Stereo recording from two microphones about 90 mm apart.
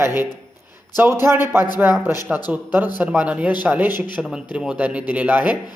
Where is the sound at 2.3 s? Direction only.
10° right (ahead or behind).